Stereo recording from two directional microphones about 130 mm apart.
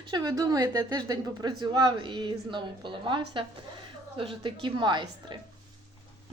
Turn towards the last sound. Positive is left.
turn(degrees=-35)  # may be behind; listen again after turning